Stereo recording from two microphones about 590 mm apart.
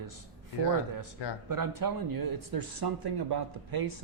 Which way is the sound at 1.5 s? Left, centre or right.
Right.